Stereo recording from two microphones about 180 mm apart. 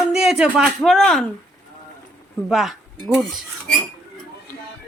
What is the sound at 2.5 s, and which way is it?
Speech, centre (ahead or behind).